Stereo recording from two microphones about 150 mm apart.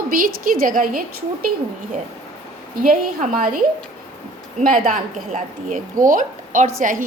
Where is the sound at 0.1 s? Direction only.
70° right (ahead or behind).